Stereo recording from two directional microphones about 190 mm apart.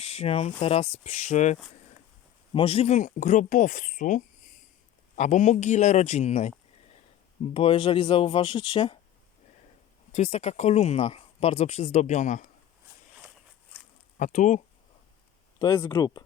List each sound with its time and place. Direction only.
0.0 s speech: 30° left (ahead or behind)
10.1 s speech: 35° left (ahead or behind)
14.2 s speech: 40° left (ahead or behind)
15.5 s speech: 20° left (ahead or behind)